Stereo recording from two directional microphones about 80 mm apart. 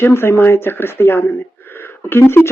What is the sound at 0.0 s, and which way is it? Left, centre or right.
Speech, left.